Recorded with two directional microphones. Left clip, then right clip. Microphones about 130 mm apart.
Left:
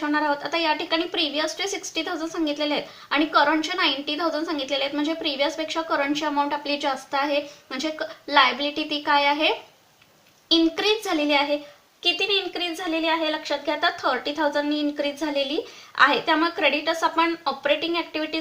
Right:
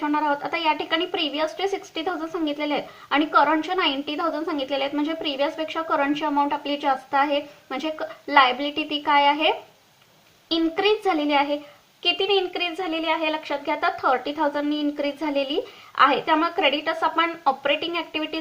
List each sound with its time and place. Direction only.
0.0 s speech: 40° right (ahead or behind)
10.5 s a woman's voice: 40° right (ahead or behind)